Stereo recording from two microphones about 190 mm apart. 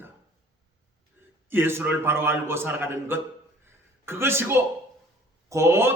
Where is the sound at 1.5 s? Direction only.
10° right (ahead or behind).